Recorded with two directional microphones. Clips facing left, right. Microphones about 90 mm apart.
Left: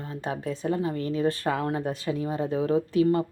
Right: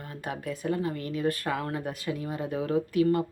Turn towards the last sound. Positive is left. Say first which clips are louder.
# left 2 dB
turn(degrees=30)  # may be behind; listen again after turning